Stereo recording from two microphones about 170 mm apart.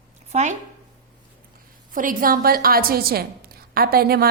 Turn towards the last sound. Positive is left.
turn(degrees=-65)  # may be behind; listen again after turning